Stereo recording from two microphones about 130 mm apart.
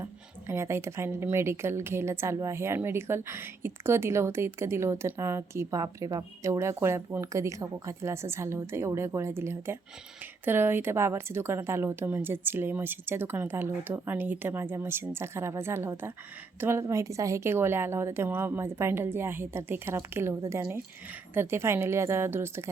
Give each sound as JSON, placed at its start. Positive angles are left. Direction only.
{"t": 0.0, "sound": "a woman's voice", "side_deg": -20}